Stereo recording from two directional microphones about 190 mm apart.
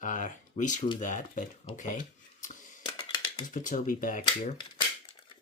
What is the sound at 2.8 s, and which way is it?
Finger snapping, 30° left (ahead or behind).